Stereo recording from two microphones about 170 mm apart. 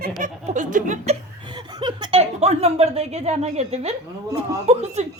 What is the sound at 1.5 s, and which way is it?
A woman's voice, 25° right (ahead or behind).